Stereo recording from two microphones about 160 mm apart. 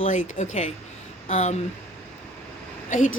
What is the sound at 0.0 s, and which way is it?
Speech, 50° left (ahead or behind).